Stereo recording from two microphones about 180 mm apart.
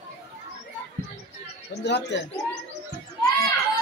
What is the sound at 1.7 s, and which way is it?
Speech, 70° left (ahead or behind).